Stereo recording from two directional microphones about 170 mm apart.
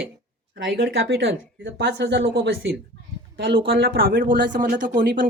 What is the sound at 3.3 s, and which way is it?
Speech, 65° right (ahead or behind).